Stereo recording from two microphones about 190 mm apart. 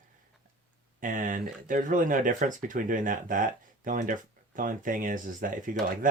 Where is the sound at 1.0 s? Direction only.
45° right (ahead or behind).